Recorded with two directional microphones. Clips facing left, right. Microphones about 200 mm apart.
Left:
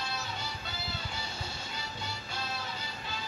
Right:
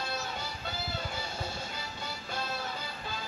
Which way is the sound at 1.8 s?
50° right (ahead or behind).